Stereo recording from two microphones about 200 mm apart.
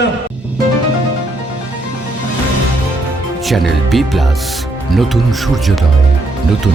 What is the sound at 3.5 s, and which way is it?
Speech, centre (ahead or behind).